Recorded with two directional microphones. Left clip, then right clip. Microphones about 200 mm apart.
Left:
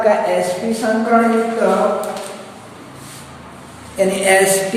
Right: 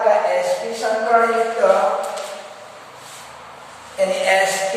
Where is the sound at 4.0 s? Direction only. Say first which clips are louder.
Left 3 dB; 55° left (ahead or behind).